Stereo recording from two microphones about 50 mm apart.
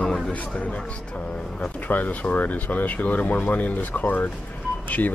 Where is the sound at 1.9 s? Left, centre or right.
Left.